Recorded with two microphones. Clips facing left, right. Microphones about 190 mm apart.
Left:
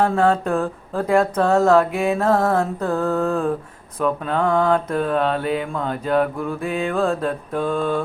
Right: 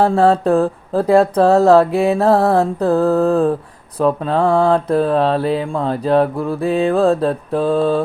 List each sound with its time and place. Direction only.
0.0 s mantra: 35° right (ahead or behind)